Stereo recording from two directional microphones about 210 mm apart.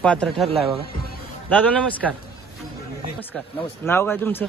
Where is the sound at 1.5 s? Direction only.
5° left (ahead or behind).